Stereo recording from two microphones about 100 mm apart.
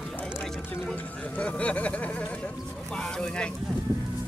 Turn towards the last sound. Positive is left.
turn(degrees=10)  # may be behind; listen again after turning